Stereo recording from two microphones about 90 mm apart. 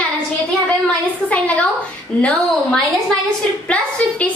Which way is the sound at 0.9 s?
15° left (ahead or behind).